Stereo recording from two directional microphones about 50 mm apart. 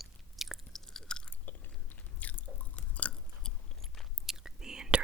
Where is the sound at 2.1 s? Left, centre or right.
Left.